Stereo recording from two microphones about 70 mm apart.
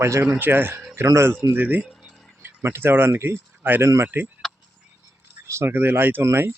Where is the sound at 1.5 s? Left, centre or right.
Right.